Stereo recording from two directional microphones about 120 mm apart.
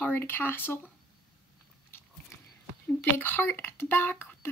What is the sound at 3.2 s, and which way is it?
A child's voice, 15° left (ahead or behind).